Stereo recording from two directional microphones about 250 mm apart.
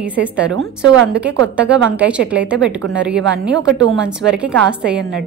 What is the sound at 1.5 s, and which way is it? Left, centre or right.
A woman's voice, centre.